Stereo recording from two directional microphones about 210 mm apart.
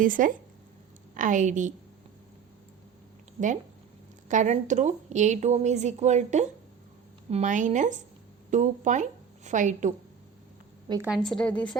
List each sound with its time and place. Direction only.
0.0 s a woman's voice: 40° right (ahead or behind)
4.3 s a woman's voice: 35° right (ahead or behind)
11.0 s a woman's voice: centre (ahead or behind)